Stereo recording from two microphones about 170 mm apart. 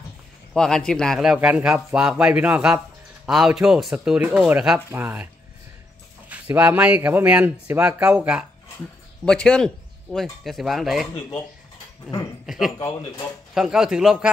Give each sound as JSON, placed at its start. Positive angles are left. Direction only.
{"t": 0.6, "sound": "speech", "side_deg": 5}
{"t": 9.2, "sound": "speech", "side_deg": 5}
{"t": 12.4, "sound": "speech", "side_deg": 0}
{"t": 12.7, "sound": "speech", "side_deg": 20}
{"t": 13.6, "sound": "speech", "side_deg": -5}